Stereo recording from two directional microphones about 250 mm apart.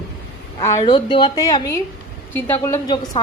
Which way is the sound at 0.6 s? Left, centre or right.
Centre.